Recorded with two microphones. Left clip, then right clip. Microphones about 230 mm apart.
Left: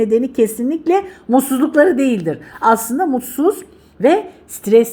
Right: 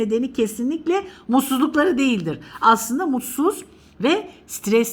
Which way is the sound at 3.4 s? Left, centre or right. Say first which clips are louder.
Left 5 dB; left.